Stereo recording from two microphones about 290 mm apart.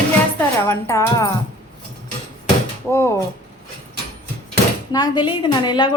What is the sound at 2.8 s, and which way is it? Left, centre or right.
Speech, centre.